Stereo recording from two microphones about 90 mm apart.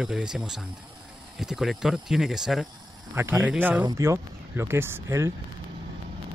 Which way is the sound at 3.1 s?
30° right (ahead or behind).